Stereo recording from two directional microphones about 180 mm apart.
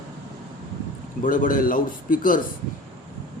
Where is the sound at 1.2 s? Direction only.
45° left (ahead or behind).